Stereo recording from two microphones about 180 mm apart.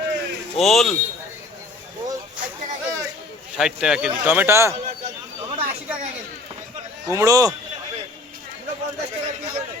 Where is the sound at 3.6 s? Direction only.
5° right (ahead or behind).